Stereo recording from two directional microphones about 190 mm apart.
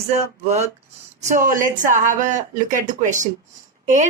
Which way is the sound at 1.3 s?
45° right (ahead or behind).